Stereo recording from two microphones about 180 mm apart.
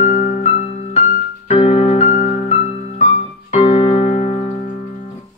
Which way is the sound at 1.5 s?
40° left (ahead or behind).